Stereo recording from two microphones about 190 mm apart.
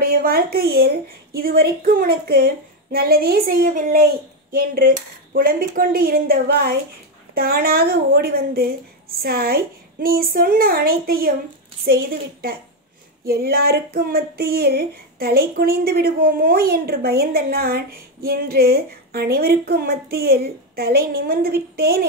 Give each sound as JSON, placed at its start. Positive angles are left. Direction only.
{"t": 0.0, "sound": "speech", "side_deg": -50}